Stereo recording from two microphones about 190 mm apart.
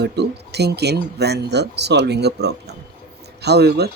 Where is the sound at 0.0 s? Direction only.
60° right (ahead or behind).